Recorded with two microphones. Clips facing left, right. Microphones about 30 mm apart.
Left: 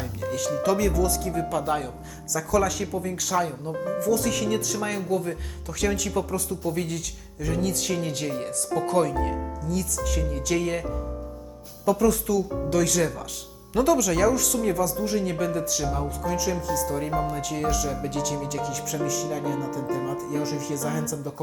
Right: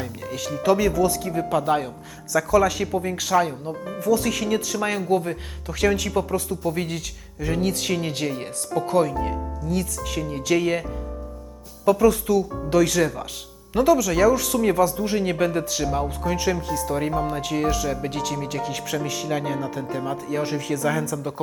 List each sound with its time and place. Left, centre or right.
0.0 s speech: centre
8.7 s speech: centre
9.6 s speech: right
11.9 s speech: right
13.7 s speech: centre; by 20.4 s right
20.4 s speech: right
21.1 s speech: right